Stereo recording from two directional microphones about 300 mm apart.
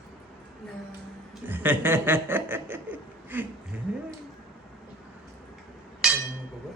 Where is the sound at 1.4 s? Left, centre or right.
Centre.